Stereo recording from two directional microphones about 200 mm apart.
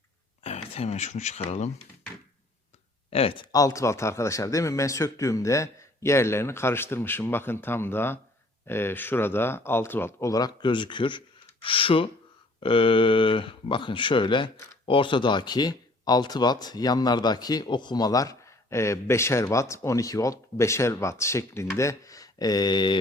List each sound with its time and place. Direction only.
0.4 s speech: 30° left (ahead or behind)
3.1 s speech: 30° left (ahead or behind)